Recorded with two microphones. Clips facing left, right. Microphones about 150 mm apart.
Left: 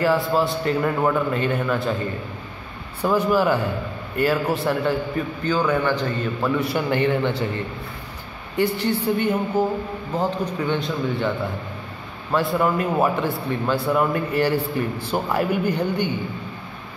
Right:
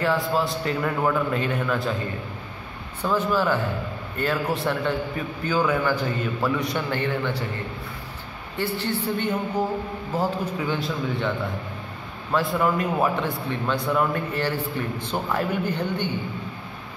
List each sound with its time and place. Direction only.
0.0 s a man's voice: centre (ahead or behind)
3.0 s a man's voice: 10° left (ahead or behind)
5.4 s a man's voice: 10° right (ahead or behind)
6.9 s a man's voice: 20° left (ahead or behind)
8.5 s a man's voice: 15° left (ahead or behind)
10.1 s a man's voice: 5° right (ahead or behind); by 16.1 s 10° left (ahead or behind)